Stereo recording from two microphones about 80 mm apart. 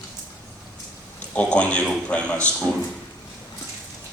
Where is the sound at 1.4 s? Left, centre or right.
Centre.